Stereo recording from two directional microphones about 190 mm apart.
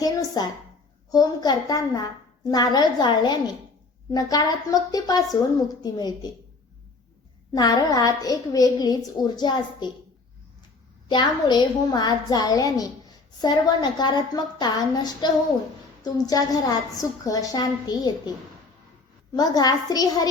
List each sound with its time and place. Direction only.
0.0 s a woman's voice: 20° left (ahead or behind)
7.5 s a woman's voice: 20° left (ahead or behind)
11.1 s a woman's voice: 20° left (ahead or behind)
19.3 s a woman's voice: 20° left (ahead or behind)